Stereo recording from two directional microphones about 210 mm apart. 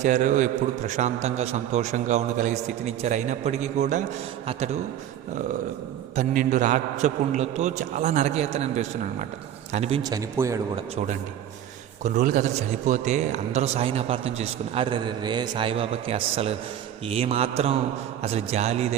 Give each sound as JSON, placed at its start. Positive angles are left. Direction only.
{"t": 0.0, "sound": "a man's voice", "side_deg": -35}
{"t": 6.1, "sound": "a man's voice", "side_deg": -35}
{"t": 10.0, "sound": "speech", "side_deg": -15}
{"t": 10.9, "sound": "a man's voice", "side_deg": -35}